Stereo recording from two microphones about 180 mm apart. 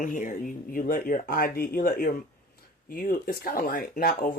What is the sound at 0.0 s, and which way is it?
Speech, 45° left (ahead or behind).